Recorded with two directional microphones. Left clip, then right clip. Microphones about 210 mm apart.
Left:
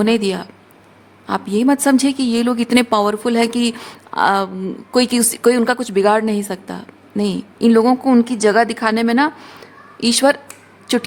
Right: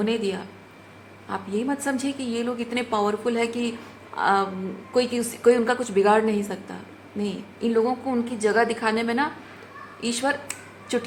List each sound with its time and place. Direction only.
0.0 s a woman's voice: 55° left (ahead or behind)